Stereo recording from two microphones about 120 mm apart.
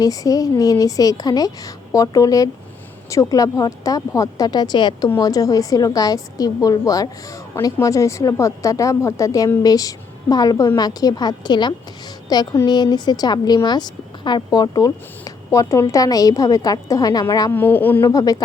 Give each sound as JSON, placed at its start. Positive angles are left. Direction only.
{"t": 0.0, "sound": "a woman's voice", "side_deg": 30}
{"t": 17.5, "sound": "a woman's voice", "side_deg": 15}
{"t": 18.1, "sound": "a woman's voice", "side_deg": 30}